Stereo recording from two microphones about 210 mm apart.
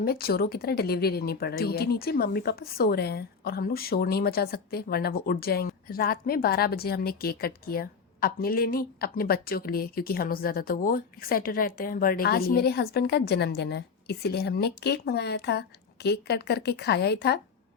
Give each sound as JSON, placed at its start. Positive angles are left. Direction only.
{"t": 0.0, "sound": "speech", "side_deg": 45}